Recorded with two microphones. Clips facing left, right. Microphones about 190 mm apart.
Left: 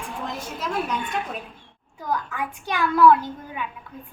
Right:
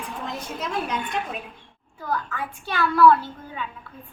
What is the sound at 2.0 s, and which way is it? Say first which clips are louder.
Speech: left 1 dB; 15° left (ahead or behind).